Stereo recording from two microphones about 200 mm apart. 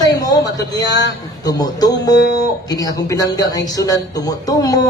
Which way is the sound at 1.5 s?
20° left (ahead or behind).